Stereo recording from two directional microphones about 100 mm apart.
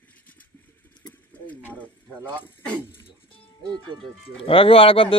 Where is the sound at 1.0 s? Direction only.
45° left (ahead or behind).